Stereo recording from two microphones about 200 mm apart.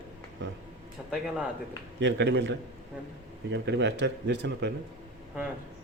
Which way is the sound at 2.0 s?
65° right (ahead or behind).